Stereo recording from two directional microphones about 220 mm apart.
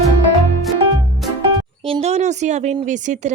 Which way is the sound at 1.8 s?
25° right (ahead or behind).